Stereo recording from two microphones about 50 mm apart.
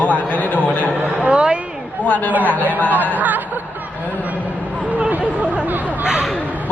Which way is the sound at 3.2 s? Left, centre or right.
Right.